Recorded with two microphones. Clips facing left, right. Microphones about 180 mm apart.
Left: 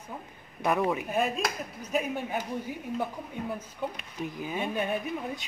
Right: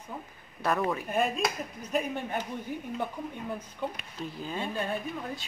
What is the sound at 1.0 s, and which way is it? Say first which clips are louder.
Speech: even; centre (ahead or behind).